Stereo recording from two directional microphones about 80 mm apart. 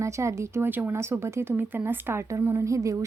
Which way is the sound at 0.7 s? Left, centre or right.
Right.